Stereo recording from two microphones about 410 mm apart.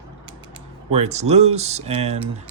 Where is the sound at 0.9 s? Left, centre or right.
Centre.